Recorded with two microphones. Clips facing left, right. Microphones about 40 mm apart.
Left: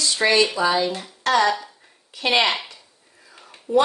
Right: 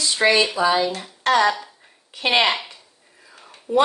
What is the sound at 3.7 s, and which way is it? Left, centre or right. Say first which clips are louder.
Speech: even; right.